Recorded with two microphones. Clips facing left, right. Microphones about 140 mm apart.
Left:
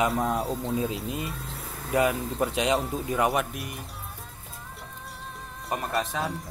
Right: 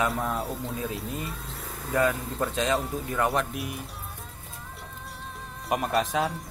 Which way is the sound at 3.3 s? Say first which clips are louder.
Even; centre (ahead or behind).